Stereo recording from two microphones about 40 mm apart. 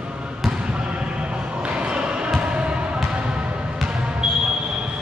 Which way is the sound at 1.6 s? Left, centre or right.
Right.